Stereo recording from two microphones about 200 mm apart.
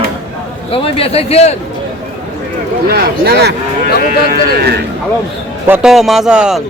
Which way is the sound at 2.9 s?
50° right (ahead or behind).